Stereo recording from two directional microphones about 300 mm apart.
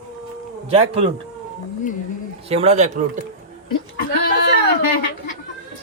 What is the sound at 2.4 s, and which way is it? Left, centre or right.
Speech, right.